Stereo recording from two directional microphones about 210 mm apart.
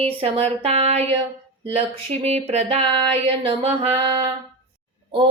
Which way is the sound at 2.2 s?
30° right (ahead or behind).